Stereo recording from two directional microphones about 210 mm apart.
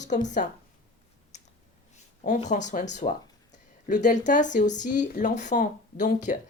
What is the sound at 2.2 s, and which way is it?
Speech, 35° left (ahead or behind).